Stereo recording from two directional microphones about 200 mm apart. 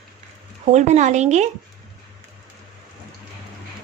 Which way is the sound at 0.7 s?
35° right (ahead or behind).